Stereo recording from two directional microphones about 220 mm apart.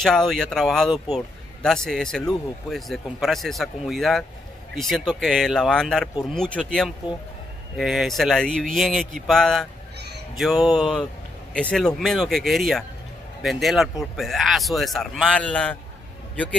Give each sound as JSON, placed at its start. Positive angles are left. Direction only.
{"t": 0.0, "sound": "speech", "side_deg": 0}
{"t": 9.9, "sound": "a sound", "side_deg": -50}
{"t": 10.3, "sound": "speech", "side_deg": 0}